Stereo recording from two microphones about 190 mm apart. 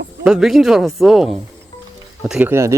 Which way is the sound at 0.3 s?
Centre (ahead or behind).